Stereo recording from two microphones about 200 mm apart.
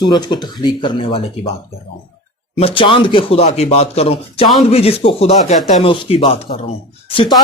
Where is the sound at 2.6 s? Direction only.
30° left (ahead or behind).